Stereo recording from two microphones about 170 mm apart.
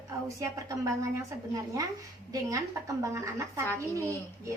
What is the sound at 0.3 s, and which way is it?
A woman's voice, 20° right (ahead or behind).